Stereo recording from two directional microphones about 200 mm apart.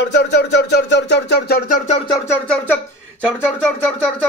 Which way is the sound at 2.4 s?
5° left (ahead or behind).